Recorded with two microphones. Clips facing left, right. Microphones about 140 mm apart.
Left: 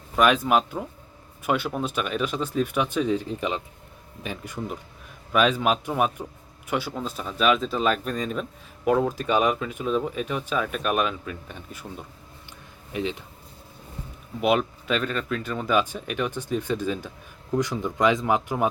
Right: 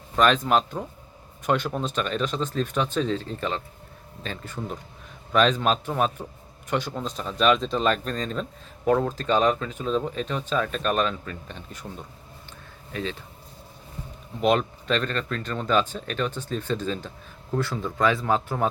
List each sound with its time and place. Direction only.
0.2 s speech: 10° left (ahead or behind)
14.4 s speech: 5° left (ahead or behind)